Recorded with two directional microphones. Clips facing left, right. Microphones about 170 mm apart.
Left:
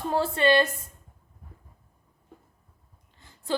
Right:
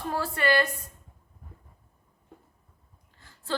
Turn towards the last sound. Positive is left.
turn(degrees=20)  # may be behind; listen again after turning